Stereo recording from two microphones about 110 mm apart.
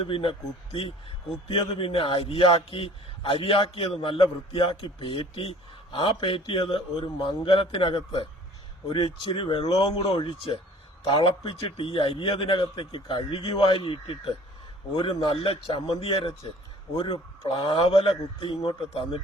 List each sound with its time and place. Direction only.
0.0 s a man's voice: 55° left (ahead or behind)